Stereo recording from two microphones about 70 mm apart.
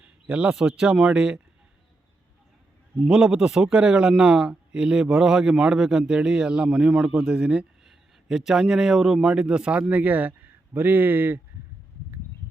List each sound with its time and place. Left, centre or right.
0.0 s a man's voice: centre
3.0 s a man's voice: centre
7.1 s speech: right
7.3 s a man's voice: centre
7.9 s a man's voice: centre; by 11.3 s right